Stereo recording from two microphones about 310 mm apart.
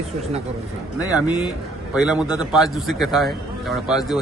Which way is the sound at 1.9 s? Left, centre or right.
Centre.